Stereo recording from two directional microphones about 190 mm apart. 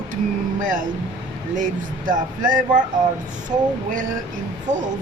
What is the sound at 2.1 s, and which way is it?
A woman's voice, 45° right (ahead or behind).